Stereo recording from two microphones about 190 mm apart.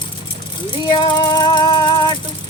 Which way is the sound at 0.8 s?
25° left (ahead or behind).